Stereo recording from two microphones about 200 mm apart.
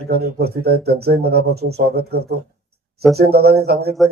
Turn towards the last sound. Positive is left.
turn(degrees=-50)  # may be behind; listen again after turning